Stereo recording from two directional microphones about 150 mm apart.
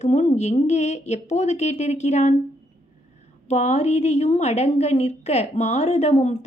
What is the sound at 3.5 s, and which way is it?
A woman's voice, 50° left (ahead or behind).